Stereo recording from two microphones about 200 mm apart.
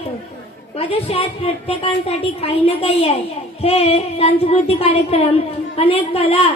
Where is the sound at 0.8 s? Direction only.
30° left (ahead or behind).